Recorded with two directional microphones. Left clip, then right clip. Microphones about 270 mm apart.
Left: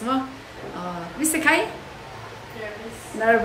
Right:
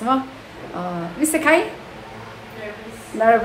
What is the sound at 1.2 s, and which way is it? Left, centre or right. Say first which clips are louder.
Speech: right 3 dB; centre.